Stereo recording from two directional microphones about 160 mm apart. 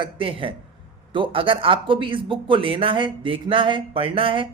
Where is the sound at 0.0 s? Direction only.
35° right (ahead or behind).